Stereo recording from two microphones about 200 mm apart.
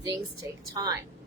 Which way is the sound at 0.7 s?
20° right (ahead or behind).